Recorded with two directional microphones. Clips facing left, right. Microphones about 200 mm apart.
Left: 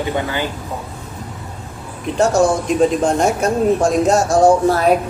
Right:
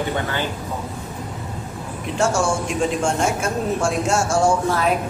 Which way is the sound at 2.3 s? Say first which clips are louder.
Left 7 dB; 35° left (ahead or behind).